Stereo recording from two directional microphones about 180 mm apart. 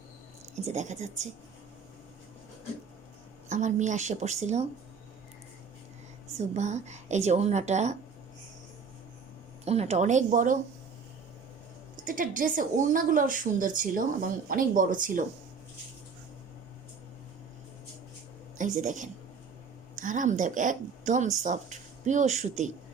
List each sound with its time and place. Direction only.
0.6 s speech: 40° right (ahead or behind)
3.5 s speech: 45° right (ahead or behind)
6.5 s speech: 40° right (ahead or behind)
9.6 s speech: 35° right (ahead or behind)
12.0 s a woman's voice: 50° right (ahead or behind)
18.8 s a woman's voice: 45° right (ahead or behind)